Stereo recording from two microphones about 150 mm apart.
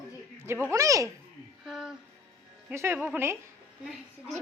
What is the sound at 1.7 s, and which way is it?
Music, centre (ahead or behind).